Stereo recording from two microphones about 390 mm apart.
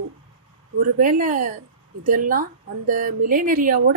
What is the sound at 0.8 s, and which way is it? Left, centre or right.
A woman's voice, right.